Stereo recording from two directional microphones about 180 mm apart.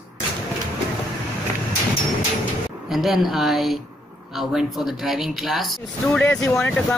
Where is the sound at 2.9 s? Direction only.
Centre (ahead or behind); by 6.7 s 15° left (ahead or behind).